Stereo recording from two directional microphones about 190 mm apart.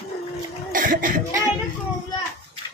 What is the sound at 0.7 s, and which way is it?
Speech, 45° right (ahead or behind).